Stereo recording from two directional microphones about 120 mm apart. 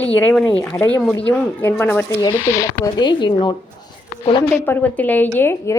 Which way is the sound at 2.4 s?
25° left (ahead or behind).